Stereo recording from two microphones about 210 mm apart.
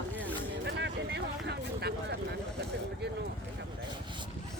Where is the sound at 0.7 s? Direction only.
55° right (ahead or behind).